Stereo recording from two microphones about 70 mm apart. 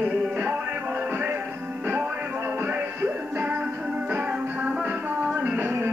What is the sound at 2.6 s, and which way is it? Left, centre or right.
Music, right.